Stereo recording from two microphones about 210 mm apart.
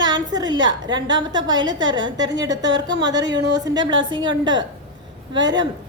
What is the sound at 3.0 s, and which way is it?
A woman's voice, 20° right (ahead or behind).